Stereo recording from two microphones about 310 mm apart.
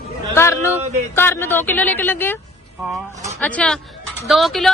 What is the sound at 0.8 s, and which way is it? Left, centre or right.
Speech, right.